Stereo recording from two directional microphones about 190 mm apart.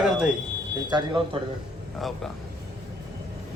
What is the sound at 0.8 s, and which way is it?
Speech, 25° right (ahead or behind).